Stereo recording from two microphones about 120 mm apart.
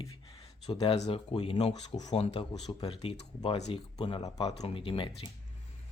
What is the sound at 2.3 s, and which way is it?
Speech, 45° left (ahead or behind).